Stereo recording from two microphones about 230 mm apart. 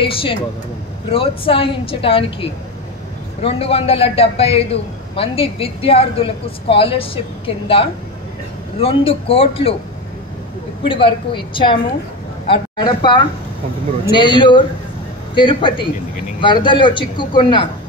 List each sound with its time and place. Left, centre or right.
0.0 s a woman's voice: left
10.8 s a woman's voice: left